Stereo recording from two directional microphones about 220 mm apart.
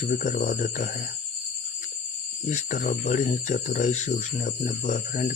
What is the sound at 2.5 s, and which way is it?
Speech, 35° left (ahead or behind).